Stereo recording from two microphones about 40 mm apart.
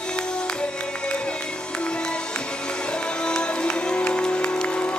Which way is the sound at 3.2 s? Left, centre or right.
Left.